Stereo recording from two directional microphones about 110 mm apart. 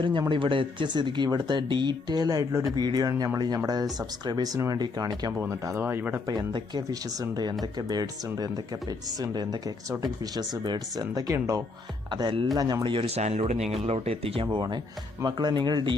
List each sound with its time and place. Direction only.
0.0 s speech: 50° right (ahead or behind); by 2.6 s 30° right (ahead or behind)
2.7 s speech: 40° right (ahead or behind)
5.4 s speech: 25° right (ahead or behind)
6.2 s speech: 40° right (ahead or behind)
12.1 s speech: 50° right (ahead or behind)
12.5 s speech: 35° right (ahead or behind)
13.1 s speech: 75° right (ahead or behind)
14.5 s speech: 45° right (ahead or behind)